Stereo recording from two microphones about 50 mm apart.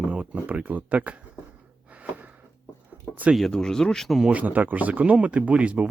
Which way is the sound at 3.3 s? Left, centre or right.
Centre.